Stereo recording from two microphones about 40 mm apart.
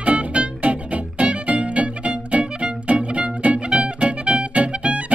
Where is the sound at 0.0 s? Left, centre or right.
Right.